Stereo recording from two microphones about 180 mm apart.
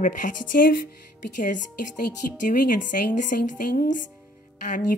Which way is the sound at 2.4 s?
50° left (ahead or behind).